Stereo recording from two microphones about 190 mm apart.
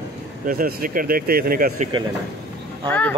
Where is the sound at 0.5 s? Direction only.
45° right (ahead or behind).